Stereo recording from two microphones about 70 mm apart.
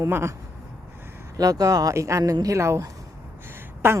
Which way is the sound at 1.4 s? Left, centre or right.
Right.